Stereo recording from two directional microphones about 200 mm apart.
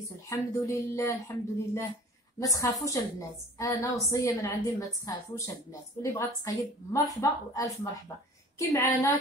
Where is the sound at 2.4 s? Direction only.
15° left (ahead or behind).